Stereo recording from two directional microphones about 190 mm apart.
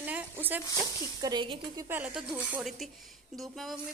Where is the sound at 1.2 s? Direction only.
25° right (ahead or behind).